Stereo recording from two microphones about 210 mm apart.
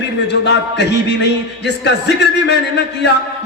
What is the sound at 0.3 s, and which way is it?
Music, 55° left (ahead or behind).